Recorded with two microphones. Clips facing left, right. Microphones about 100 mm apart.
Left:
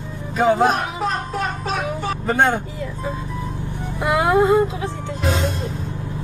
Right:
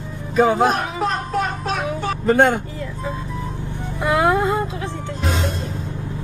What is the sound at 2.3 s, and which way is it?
Speech, 15° left (ahead or behind).